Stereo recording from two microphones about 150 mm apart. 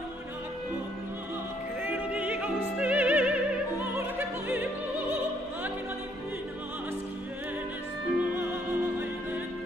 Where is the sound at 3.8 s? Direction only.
15° right (ahead or behind).